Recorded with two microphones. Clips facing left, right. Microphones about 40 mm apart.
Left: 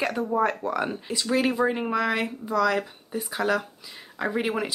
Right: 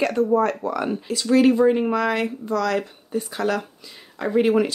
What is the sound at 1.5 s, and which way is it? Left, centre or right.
Speech, centre.